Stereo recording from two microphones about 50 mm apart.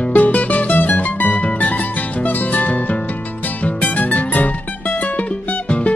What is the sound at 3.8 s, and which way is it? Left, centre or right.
Music, left.